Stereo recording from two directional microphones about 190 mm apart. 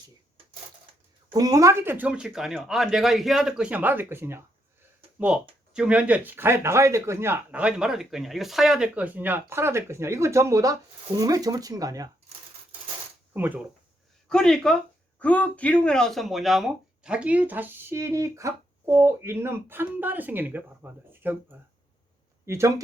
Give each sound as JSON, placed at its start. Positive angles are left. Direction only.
{"t": 1.3, "sound": "speech", "side_deg": -20}
{"t": 13.3, "sound": "speech", "side_deg": -10}
{"t": 14.3, "sound": "speech", "side_deg": 5}